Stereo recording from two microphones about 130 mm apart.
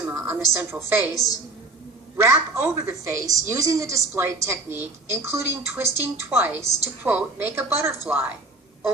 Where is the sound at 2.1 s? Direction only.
20° right (ahead or behind).